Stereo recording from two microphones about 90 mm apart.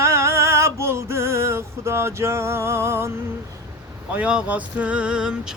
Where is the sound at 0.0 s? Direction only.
30° right (ahead or behind).